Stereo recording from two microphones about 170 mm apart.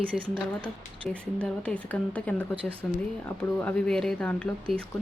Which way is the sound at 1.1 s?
5° left (ahead or behind).